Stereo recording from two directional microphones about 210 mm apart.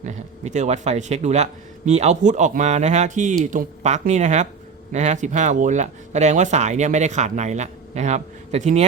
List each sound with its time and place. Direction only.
0.0 s speech: 35° right (ahead or behind)